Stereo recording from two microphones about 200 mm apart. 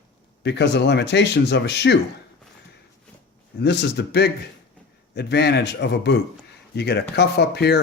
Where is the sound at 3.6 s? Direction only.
55° left (ahead or behind).